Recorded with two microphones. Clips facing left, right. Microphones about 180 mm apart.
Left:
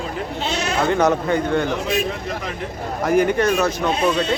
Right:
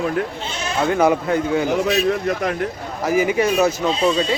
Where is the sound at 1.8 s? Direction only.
55° right (ahead or behind).